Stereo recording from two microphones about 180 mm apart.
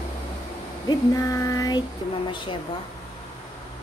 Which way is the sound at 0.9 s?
20° left (ahead or behind).